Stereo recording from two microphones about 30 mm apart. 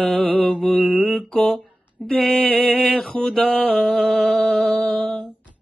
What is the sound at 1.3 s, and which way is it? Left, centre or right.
Mantra, left.